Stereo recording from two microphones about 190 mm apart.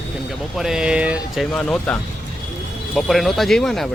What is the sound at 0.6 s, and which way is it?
Speech, 5° right (ahead or behind).